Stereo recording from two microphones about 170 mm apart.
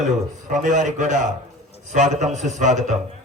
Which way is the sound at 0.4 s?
50° right (ahead or behind).